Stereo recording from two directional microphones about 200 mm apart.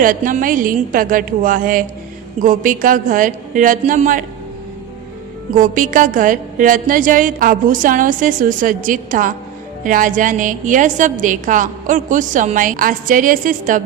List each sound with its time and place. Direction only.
0.0 s a woman's voice: 40° right (ahead or behind)
5.5 s a woman's voice: 40° right (ahead or behind)